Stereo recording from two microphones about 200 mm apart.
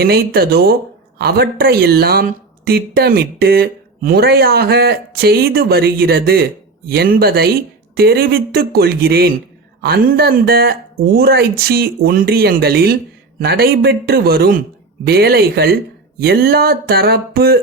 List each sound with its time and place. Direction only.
0.0 s speech: 50° right (ahead or behind)